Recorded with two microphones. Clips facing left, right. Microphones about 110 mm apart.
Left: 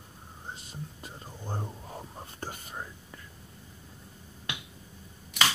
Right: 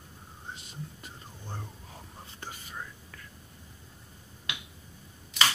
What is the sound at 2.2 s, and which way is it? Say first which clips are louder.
Whispering: left 4 dB; 50° left (ahead or behind).